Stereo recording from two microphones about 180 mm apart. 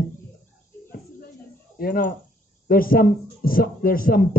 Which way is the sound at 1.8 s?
55° left (ahead or behind).